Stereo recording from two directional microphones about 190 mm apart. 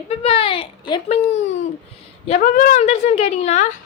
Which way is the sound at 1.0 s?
35° left (ahead or behind).